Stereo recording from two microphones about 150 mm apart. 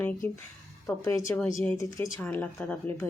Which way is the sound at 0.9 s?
20° left (ahead or behind).